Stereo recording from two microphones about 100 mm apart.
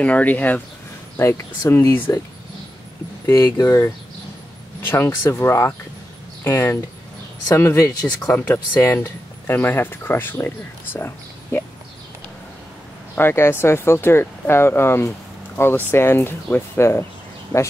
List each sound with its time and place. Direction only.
0.0 s speech: 15° left (ahead or behind); by 2.0 s 35° left (ahead or behind)
3.3 s speech: 25° left (ahead or behind)
8.4 s speech: 20° left (ahead or behind)
13.1 s speech: 25° left (ahead or behind)
17.5 s speech: 15° left (ahead or behind)